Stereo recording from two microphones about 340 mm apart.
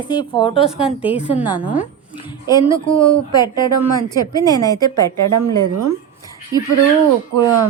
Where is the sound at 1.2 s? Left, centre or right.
Centre.